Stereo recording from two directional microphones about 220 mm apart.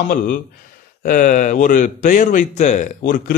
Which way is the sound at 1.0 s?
40° left (ahead or behind).